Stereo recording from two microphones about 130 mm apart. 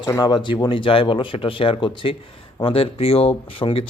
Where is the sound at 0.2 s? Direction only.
35° left (ahead or behind).